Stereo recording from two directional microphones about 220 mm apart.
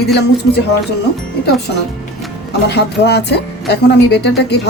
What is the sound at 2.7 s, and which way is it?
Speech, 50° left (ahead or behind).